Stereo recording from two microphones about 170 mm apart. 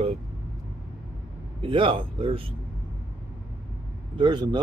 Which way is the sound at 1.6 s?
30° right (ahead or behind).